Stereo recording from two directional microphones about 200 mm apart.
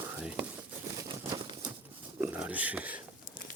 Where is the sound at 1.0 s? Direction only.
20° right (ahead or behind).